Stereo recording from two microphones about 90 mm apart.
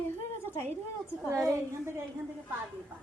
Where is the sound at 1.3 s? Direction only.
30° right (ahead or behind).